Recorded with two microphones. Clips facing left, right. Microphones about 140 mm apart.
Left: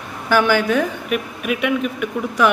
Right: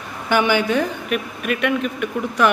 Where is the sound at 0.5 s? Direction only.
Centre (ahead or behind).